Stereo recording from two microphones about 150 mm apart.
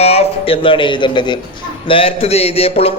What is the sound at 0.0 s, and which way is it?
Speech, 45° left (ahead or behind).